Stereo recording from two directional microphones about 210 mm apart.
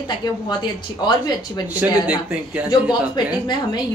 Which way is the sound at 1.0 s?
20° left (ahead or behind).